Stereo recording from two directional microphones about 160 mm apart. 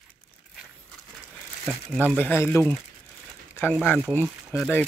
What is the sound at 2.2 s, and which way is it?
Speech, 10° left (ahead or behind).